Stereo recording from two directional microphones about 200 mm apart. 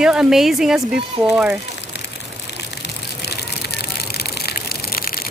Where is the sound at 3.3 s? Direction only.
55° left (ahead or behind).